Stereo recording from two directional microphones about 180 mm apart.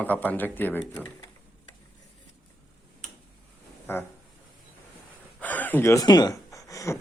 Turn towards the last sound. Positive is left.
turn(degrees=20)  # may be behind; listen again after turning